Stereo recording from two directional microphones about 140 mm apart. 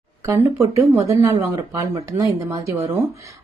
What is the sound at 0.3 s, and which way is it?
Speech, 20° right (ahead or behind).